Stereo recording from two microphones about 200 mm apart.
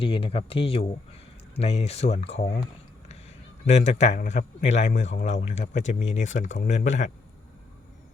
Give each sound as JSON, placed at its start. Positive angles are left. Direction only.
{"t": 0.0, "sound": "speech", "side_deg": 25}
{"t": 3.7, "sound": "speech", "side_deg": 35}